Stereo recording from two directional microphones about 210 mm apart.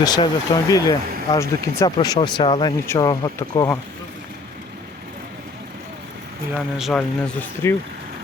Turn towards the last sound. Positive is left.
turn(degrees=5)  # may be behind; listen again after turning